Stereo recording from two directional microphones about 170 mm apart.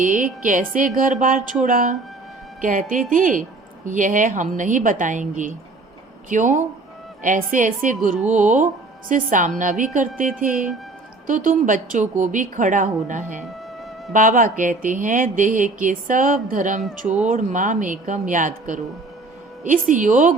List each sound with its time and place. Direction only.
0.0 s speech: 50° right (ahead or behind)
11.3 s speech: 50° right (ahead or behind)